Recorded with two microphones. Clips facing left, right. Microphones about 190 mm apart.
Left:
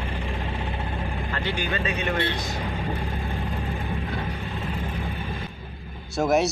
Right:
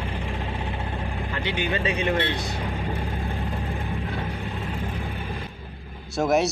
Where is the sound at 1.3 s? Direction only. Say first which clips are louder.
Right 2 dB; 15° right (ahead or behind); by 2.6 s 30° right (ahead or behind).